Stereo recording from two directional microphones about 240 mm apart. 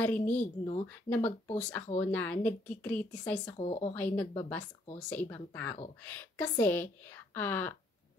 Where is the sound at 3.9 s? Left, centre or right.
Centre.